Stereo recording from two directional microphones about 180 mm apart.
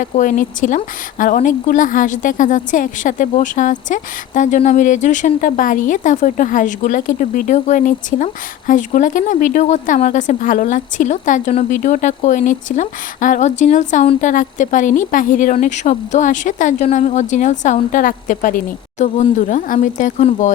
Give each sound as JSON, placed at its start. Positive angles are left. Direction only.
{"t": 0.0, "sound": "speech", "side_deg": 45}